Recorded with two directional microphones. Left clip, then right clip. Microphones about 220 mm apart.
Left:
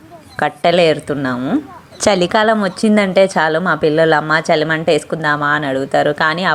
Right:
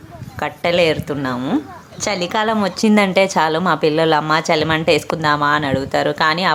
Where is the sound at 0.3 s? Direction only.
15° left (ahead or behind).